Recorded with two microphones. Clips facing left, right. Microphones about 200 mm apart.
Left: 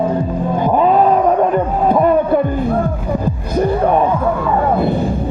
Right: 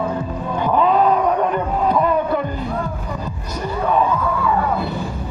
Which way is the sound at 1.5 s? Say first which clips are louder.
Left 4 dB; 50° left (ahead or behind).